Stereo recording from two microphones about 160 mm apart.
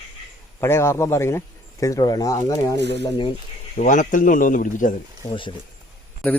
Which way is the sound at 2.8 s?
90° right.